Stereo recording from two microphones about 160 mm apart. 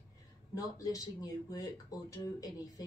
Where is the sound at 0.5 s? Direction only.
20° left (ahead or behind).